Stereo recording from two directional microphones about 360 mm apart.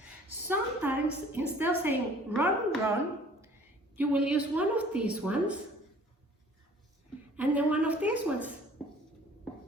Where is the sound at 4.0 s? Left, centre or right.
Centre.